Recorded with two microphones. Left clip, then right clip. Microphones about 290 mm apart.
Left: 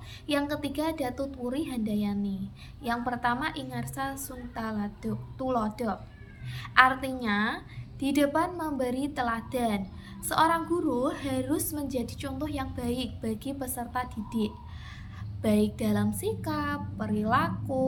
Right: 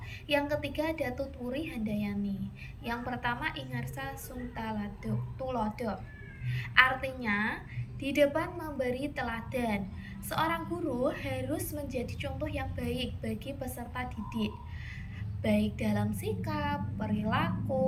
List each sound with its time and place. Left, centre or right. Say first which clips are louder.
0.3 s a woman's voice: even; centre